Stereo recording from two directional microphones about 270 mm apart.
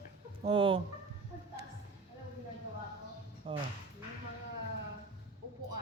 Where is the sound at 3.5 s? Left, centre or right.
Right.